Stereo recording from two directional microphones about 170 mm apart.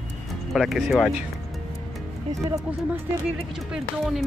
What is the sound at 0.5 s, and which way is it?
Speech, centre (ahead or behind).